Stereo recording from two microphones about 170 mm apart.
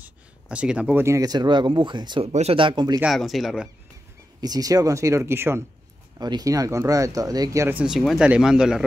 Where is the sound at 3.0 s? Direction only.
Centre (ahead or behind).